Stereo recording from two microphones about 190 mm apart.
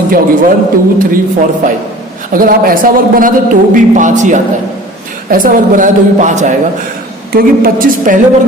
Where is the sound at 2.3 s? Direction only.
50° right (ahead or behind).